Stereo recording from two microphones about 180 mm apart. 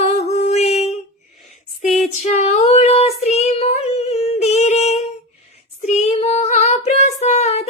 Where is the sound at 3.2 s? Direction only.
35° left (ahead or behind).